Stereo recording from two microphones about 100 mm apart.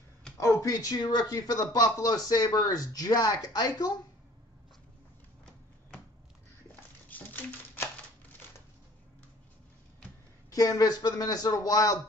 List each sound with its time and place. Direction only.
0.4 s speech: 30° left (ahead or behind)
7.1 s typewriter: 20° left (ahead or behind)
10.5 s speech: 35° left (ahead or behind)